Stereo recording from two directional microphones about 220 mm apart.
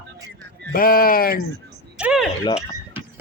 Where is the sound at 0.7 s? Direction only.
40° left (ahead or behind).